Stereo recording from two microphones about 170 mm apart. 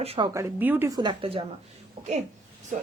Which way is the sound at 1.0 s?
30° right (ahead or behind).